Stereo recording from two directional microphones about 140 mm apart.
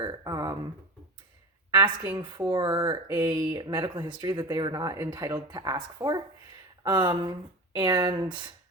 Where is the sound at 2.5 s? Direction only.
30° right (ahead or behind).